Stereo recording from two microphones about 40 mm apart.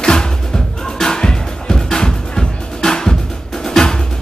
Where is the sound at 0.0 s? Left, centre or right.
Centre.